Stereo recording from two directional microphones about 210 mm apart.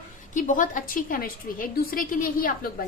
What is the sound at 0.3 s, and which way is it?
A woman's voice, 40° left (ahead or behind).